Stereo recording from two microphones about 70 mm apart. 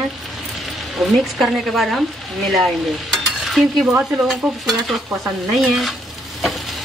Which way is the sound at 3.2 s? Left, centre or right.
Centre.